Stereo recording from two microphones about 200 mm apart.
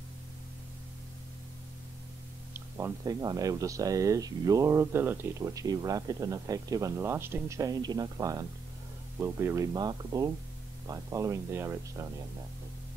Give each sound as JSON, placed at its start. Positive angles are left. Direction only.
{"t": 2.5, "sound": "speech", "side_deg": -15}